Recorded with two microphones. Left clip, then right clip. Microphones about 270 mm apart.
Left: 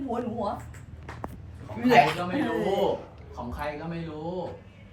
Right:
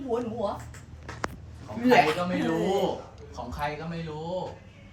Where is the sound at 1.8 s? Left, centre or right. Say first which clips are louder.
Left 1 dB; centre.